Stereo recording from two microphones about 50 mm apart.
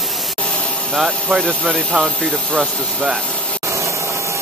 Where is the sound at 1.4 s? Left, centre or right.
Centre.